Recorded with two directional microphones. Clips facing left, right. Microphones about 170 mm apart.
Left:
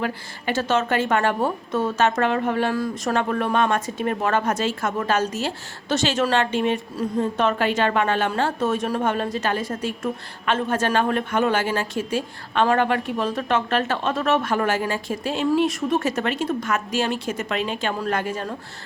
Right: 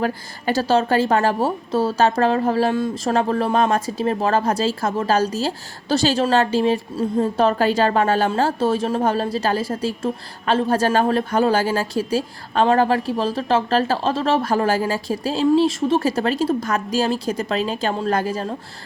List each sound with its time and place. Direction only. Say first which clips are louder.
0.0 s a woman's voice: right 4 dB; 35° right (ahead or behind)